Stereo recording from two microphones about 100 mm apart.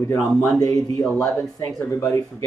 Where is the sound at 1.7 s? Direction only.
30° left (ahead or behind).